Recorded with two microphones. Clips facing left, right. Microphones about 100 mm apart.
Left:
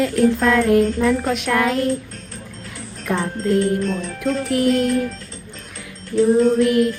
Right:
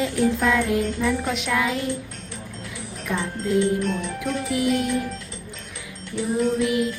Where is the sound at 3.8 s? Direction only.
30° left (ahead or behind).